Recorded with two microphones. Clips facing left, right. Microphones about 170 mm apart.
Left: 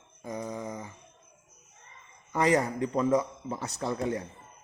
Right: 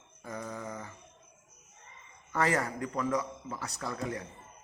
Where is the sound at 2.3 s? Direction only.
20° left (ahead or behind).